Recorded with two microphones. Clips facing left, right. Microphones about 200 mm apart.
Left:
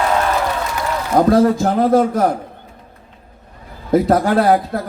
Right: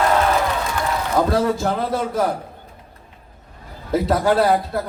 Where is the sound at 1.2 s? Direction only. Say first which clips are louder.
Left 7 dB; 50° left (ahead or behind).